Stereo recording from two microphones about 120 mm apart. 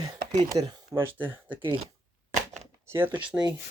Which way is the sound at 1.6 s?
50° right (ahead or behind).